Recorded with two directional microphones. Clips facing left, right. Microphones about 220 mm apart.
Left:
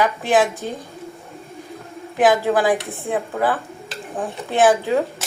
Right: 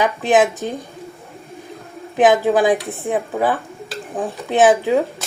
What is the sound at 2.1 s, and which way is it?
A woman's voice, 20° right (ahead or behind).